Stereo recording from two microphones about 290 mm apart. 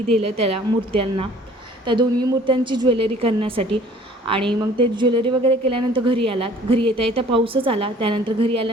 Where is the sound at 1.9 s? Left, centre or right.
Centre.